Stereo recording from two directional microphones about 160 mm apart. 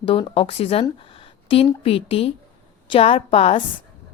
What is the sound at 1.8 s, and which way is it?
A woman's voice, 35° left (ahead or behind).